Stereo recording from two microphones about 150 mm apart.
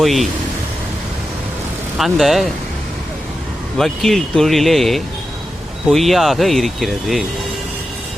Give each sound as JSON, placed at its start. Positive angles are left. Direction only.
{"t": 0.0, "sound": "speech", "side_deg": 0}
{"t": 2.0, "sound": "speech", "side_deg": 0}
{"t": 3.8, "sound": "speech", "side_deg": 0}